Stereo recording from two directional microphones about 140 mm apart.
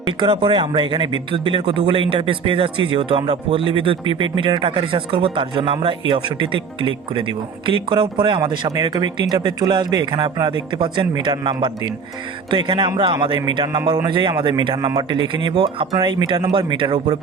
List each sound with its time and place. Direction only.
0.2 s speech: 35° right (ahead or behind)